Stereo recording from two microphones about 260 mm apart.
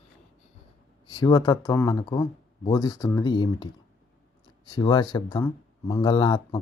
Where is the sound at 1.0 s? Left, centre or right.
Centre.